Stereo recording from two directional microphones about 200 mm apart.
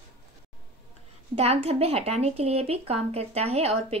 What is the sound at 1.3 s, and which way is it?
Speech, 30° right (ahead or behind).